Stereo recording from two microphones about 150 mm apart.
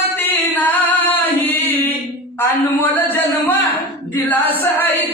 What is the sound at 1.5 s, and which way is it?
Chant, 10° left (ahead or behind).